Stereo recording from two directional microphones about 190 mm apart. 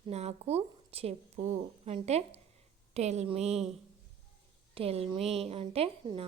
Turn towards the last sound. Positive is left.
turn(degrees=-30)  # may be behind; listen again after turning